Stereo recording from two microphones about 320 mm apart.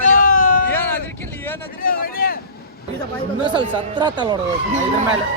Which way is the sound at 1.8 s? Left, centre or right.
Left.